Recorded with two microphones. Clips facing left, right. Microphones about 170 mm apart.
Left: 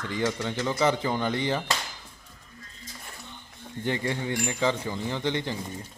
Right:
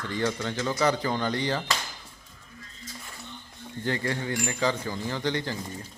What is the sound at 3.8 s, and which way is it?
A man's voice, 20° left (ahead or behind).